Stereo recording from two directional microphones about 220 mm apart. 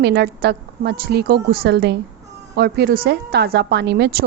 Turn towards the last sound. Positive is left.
turn(degrees=-50)  # may be behind; listen again after turning